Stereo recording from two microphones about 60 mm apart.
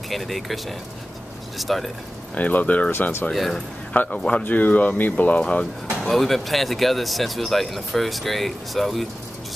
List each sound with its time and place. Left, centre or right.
0.1 s speech: centre
2.3 s speech: left
2.9 s speech: left
3.3 s speech: centre
4.1 s speech: centre
6.0 s speech: centre